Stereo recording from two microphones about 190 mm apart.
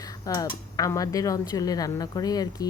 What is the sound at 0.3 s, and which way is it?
Speech, 20° left (ahead or behind).